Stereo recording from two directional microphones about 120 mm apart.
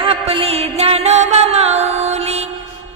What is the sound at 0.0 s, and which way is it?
Music, 50° right (ahead or behind).